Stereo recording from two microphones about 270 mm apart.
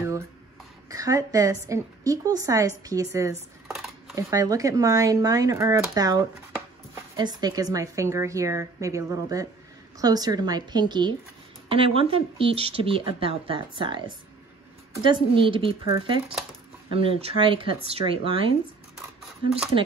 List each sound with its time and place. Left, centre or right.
0.8 s a woman's voice: centre
3.3 s dishes: centre
4.1 s a woman's voice: centre
15.0 s a woman's voice: centre